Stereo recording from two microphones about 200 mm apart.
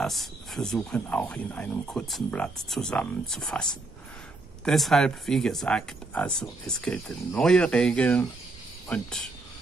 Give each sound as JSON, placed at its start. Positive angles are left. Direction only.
{"t": 0.0, "sound": "speech", "side_deg": 0}
{"t": 4.6, "sound": "speech", "side_deg": 0}